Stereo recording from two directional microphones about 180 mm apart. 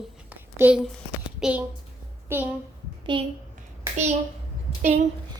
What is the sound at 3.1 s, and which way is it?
Speech, 25° right (ahead or behind).